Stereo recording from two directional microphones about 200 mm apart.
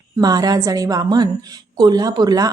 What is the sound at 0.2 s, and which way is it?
A woman's voice, 20° right (ahead or behind).